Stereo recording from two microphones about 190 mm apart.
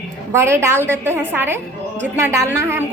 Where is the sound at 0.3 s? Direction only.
15° right (ahead or behind).